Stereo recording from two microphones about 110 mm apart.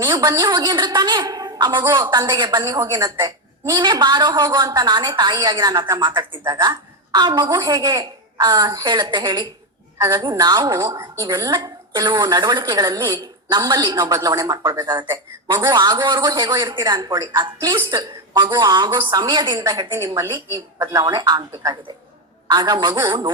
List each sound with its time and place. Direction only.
0.0 s a woman's voice: 40° right (ahead or behind)
10.8 s a woman's voice: 25° right (ahead or behind)
11.3 s a woman's voice: 40° right (ahead or behind)